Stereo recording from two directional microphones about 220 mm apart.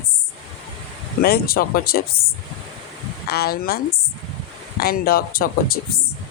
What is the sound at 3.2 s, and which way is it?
Speech, 45° left (ahead or behind).